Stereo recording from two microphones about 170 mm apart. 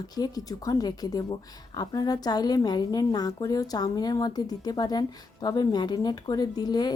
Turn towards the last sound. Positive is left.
turn(degrees=25)  # may be behind; listen again after turning